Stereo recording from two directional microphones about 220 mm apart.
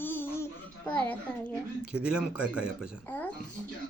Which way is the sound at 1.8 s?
5° right (ahead or behind).